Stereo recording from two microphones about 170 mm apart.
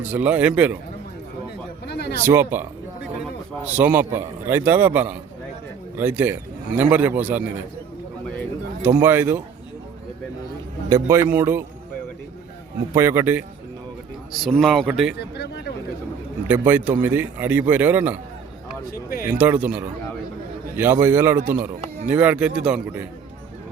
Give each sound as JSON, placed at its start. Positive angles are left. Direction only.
{"t": 0.0, "sound": "a man's voice", "side_deg": -10}
{"t": 1.9, "sound": "a sound", "side_deg": 70}
{"t": 2.2, "sound": "a man's voice", "side_deg": -15}
{"t": 8.8, "sound": "a man's voice", "side_deg": -10}
{"t": 10.8, "sound": "a man's voice", "side_deg": -20}
{"t": 12.9, "sound": "a man's voice", "side_deg": -15}
{"t": 14.4, "sound": "speech", "side_deg": 0}
{"t": 15.2, "sound": "a sound", "side_deg": 75}
{"t": 16.5, "sound": "a man's voice", "side_deg": -10}
{"t": 19.2, "sound": "a man's voice", "side_deg": -10}